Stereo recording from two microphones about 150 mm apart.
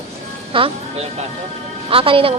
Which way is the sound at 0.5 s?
35° right (ahead or behind).